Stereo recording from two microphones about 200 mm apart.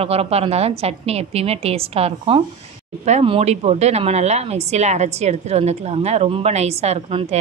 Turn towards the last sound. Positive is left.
turn(degrees=-30)  # may be behind; listen again after turning